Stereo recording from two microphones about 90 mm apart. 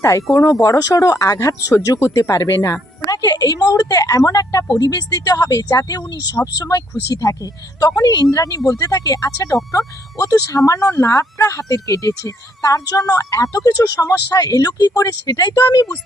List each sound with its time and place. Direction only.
0.0 s speech: 35° left (ahead or behind)